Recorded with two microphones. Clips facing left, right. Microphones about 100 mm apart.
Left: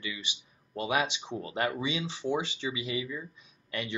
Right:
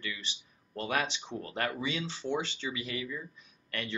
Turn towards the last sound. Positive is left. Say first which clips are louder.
# left 2 dB
turn(degrees=15)  # may be behind; listen again after turning